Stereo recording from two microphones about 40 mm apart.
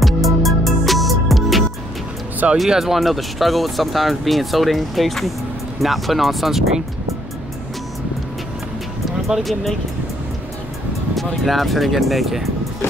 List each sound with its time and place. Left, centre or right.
0.0 s music: centre
2.4 s speech: right
2.8 s speech: centre
9.4 s speech: centre
11.1 s speech: centre